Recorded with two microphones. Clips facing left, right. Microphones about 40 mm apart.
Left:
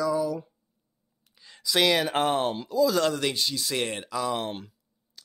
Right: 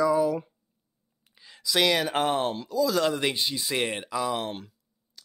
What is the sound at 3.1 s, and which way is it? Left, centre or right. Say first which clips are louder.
A man's voice: right 1 dB; centre.